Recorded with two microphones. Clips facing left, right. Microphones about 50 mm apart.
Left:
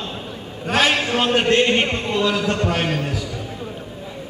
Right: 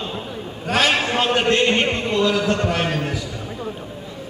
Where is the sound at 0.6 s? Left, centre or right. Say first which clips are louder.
Left 1 dB; left.